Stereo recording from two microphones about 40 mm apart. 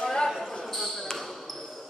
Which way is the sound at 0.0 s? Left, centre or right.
Centre.